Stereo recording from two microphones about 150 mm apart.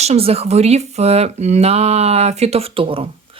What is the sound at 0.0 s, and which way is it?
A woman's voice, 45° right (ahead or behind).